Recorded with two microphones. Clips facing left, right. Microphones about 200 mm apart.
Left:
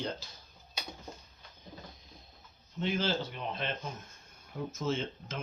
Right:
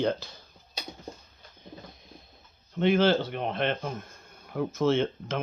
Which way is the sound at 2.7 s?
65° right (ahead or behind).